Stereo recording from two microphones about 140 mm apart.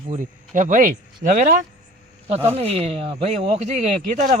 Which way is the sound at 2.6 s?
45° right (ahead or behind).